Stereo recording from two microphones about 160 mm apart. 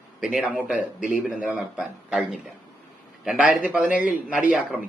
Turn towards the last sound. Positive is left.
turn(degrees=-10)  # may be behind; listen again after turning